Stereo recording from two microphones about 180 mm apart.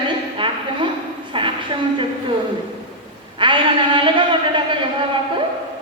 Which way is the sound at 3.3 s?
25° right (ahead or behind).